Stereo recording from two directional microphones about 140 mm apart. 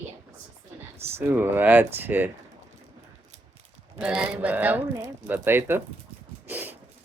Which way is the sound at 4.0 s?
5° right (ahead or behind).